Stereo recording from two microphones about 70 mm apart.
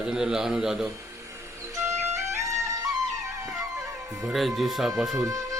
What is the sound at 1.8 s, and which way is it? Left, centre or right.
Music, right.